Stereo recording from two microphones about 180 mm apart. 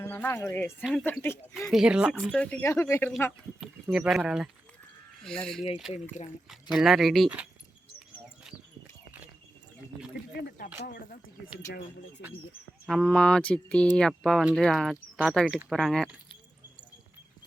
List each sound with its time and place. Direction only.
0.0 s speech: 10° left (ahead or behind)
1.5 s speech: centre (ahead or behind); by 3.1 s 15° left (ahead or behind)
3.9 s speech: 5° right (ahead or behind)
6.7 s speech: centre (ahead or behind)
10.8 s speech: 50° left (ahead or behind)
12.9 s speech: 5° left (ahead or behind)